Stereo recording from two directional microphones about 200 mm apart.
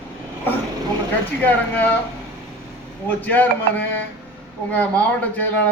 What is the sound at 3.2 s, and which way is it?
A man's voice, 10° left (ahead or behind).